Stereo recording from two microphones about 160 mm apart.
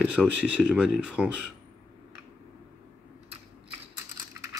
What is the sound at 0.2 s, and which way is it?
Speech, centre (ahead or behind).